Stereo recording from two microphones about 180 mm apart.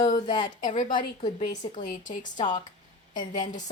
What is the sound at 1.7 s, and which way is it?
A woman's voice, 45° left (ahead or behind).